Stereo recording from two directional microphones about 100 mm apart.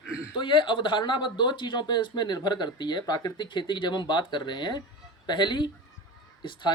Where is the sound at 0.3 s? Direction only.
55° left (ahead or behind).